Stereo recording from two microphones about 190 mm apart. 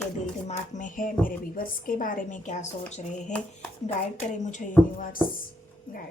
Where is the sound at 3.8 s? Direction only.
40° left (ahead or behind).